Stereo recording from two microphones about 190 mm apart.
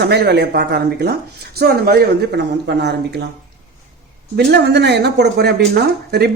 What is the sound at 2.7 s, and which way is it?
Speech, 65° right (ahead or behind).